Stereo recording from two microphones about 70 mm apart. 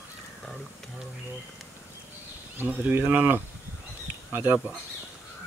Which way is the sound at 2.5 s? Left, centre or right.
Right.